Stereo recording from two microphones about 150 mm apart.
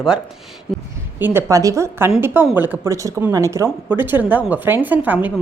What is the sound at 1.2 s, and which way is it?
A woman's voice, 15° right (ahead or behind).